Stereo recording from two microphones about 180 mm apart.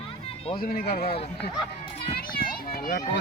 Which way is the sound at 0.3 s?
30° left (ahead or behind).